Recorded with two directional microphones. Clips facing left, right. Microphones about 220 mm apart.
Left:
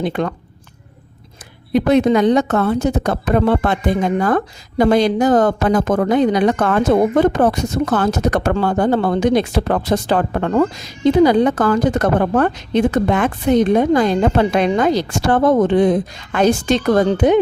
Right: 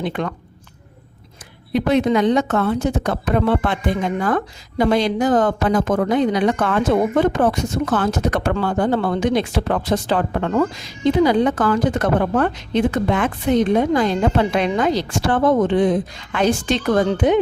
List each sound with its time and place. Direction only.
0.0 s a woman's voice: 40° left (ahead or behind)
1.7 s a woman's voice: 40° left (ahead or behind)